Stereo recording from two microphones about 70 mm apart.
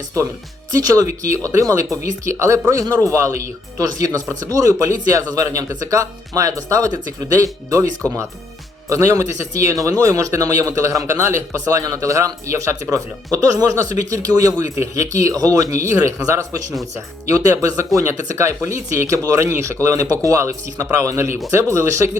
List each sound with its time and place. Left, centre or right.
0.7 s speech: right
1.5 s a man's voice: right
2.8 s a man's voice: right
3.1 s a man's voice: right